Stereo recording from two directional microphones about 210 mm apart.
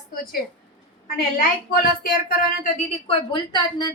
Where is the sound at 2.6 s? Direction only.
30° left (ahead or behind).